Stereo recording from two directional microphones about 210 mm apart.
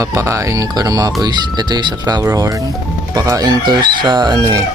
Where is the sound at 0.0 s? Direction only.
15° right (ahead or behind).